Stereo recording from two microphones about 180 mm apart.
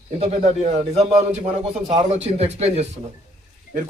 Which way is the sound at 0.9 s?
35° right (ahead or behind).